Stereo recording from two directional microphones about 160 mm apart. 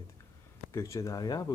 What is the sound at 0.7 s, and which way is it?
Speech, 20° left (ahead or behind).